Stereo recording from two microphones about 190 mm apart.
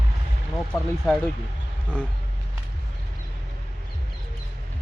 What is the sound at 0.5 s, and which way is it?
Speech, centre (ahead or behind).